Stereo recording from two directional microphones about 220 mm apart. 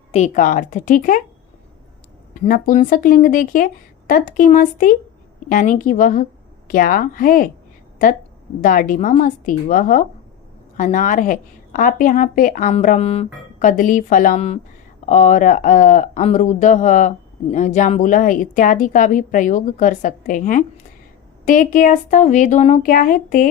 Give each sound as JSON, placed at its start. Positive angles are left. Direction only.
{"t": 0.1, "sound": "speech", "side_deg": 35}
{"t": 2.3, "sound": "a woman's voice", "side_deg": 40}